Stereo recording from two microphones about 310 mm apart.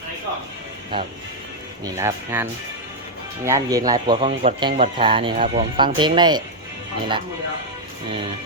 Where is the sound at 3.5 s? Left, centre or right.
Centre.